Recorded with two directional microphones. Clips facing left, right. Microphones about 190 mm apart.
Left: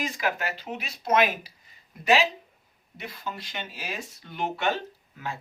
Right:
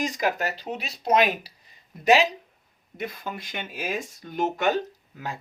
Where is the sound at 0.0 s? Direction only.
40° right (ahead or behind).